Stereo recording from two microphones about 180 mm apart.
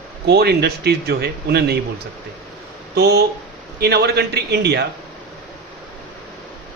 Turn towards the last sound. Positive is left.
turn(degrees=-65)  # may be behind; listen again after turning